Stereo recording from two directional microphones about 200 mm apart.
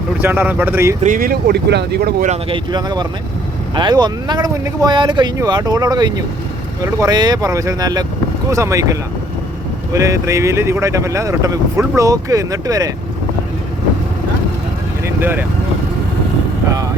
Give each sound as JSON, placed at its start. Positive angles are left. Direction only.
{"t": 0.2, "sound": "speech", "side_deg": -10}
{"t": 1.0, "sound": "speech", "side_deg": -45}
{"t": 2.2, "sound": "speech", "side_deg": -35}
{"t": 2.6, "sound": "speech", "side_deg": -20}
{"t": 15.0, "sound": "vehicle", "side_deg": -10}